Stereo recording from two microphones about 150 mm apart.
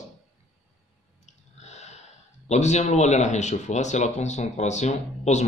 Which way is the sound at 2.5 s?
50° left (ahead or behind).